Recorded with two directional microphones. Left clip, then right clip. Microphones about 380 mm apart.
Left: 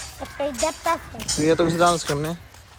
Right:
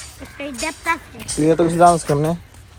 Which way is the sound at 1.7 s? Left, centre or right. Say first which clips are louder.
Right 6 dB; centre.